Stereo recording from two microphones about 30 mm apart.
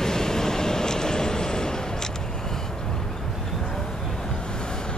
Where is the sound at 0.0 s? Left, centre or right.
Centre.